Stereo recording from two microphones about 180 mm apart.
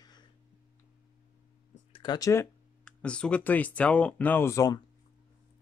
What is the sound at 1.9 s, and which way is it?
Speech, 25° left (ahead or behind).